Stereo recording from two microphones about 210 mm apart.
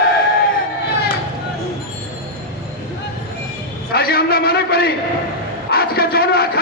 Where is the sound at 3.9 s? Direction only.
45° left (ahead or behind).